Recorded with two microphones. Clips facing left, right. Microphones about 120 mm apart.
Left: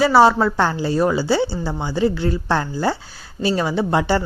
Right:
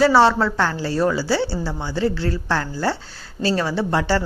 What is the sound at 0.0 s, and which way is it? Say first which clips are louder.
Speech: left 1 dB; 10° left (ahead or behind).